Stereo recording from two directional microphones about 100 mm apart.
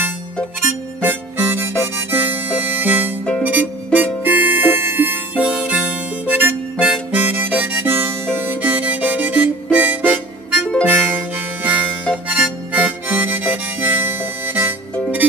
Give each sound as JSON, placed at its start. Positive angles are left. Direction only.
{"t": 0.6, "sound": "harmonica", "side_deg": -20}
{"t": 3.4, "sound": "music", "side_deg": -15}
{"t": 6.9, "sound": "harmonica", "side_deg": -15}